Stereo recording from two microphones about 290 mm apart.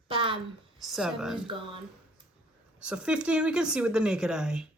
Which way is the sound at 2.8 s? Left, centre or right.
Centre.